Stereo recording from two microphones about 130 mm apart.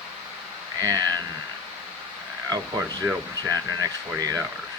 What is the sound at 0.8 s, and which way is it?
Speech, 30° right (ahead or behind).